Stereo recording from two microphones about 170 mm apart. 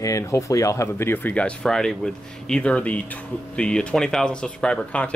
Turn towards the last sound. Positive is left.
turn(degrees=5)  # may be behind; listen again after turning